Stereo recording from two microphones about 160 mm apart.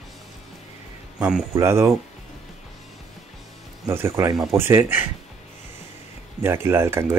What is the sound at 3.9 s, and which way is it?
Speech, 15° right (ahead or behind).